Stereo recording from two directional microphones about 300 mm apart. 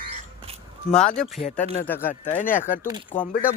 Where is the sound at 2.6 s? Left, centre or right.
Left.